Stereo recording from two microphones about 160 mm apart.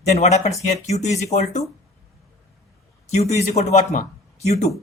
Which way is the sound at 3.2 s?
45° left (ahead or behind).